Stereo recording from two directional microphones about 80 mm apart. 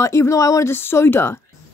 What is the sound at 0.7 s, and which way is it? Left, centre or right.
Speech, left.